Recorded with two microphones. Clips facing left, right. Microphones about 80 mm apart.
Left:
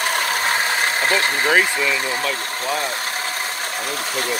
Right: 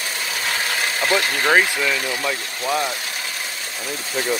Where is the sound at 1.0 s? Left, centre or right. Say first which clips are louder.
Right 2 dB; left.